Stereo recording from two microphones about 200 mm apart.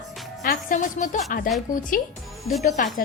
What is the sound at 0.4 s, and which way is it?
A woman's voice, 40° left (ahead or behind).